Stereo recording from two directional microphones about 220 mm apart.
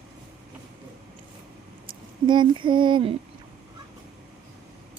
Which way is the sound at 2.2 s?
20° right (ahead or behind).